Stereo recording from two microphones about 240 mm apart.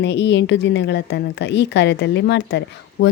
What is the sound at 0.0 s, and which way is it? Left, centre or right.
A woman's voice, left.